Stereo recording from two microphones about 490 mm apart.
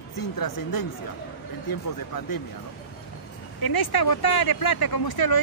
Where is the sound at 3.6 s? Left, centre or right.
Left.